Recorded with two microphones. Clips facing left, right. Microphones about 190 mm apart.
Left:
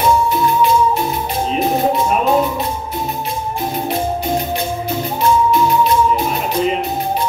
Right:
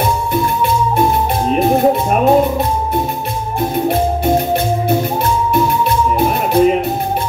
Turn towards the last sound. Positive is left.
turn(degrees=-55)  # may be behind; listen again after turning